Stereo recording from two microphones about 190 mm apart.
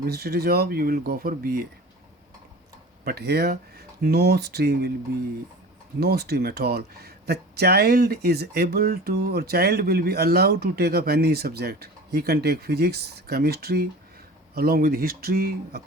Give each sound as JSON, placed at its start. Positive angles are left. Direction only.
{"t": 0.0, "sound": "speech", "side_deg": -55}
{"t": 3.0, "sound": "speech", "side_deg": -55}
{"t": 6.0, "sound": "speech", "side_deg": -55}